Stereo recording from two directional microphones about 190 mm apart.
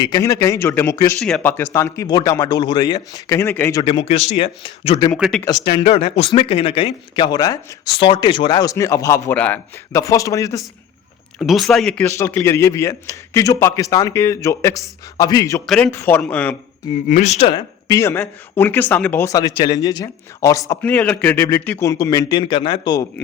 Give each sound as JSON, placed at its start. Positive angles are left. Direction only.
{"t": 0.0, "sound": "speech", "side_deg": 20}
{"t": 3.8, "sound": "speech", "side_deg": 30}
{"t": 5.1, "sound": "speech", "side_deg": 0}
{"t": 5.5, "sound": "speech", "side_deg": 20}
{"t": 11.3, "sound": "speech", "side_deg": 0}
{"t": 15.6, "sound": "speech", "side_deg": 5}
{"t": 17.1, "sound": "speech", "side_deg": 35}